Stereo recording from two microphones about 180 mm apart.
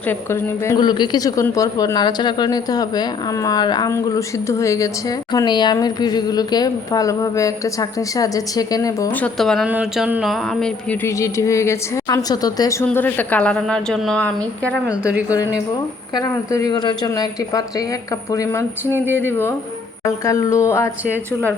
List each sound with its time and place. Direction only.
0.1 s a woman's voice: 15° left (ahead or behind)
9.2 s speech: centre (ahead or behind)
11.0 s a woman's voice: 15° left (ahead or behind)
16.1 s a woman's voice: 20° left (ahead or behind)